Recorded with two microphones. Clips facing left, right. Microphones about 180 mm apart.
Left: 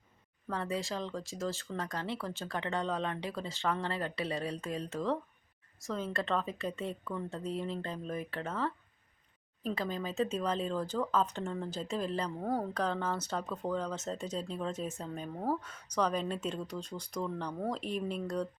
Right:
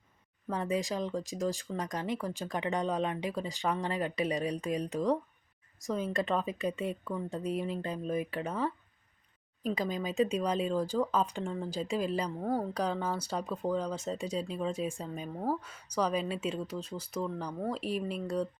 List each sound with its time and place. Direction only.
0.4 s speech: 20° right (ahead or behind)